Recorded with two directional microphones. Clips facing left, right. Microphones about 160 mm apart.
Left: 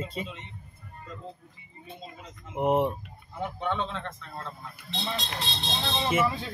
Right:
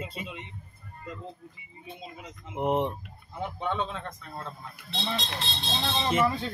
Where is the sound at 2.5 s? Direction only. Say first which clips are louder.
Left 2 dB; 10° left (ahead or behind).